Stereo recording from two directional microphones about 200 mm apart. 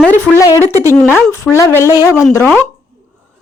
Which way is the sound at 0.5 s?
15° right (ahead or behind).